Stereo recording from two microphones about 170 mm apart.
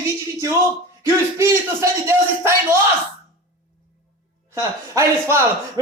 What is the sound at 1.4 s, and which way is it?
Speech, 15° right (ahead or behind).